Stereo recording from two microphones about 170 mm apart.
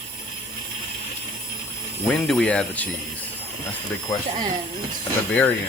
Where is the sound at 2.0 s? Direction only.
5° left (ahead or behind).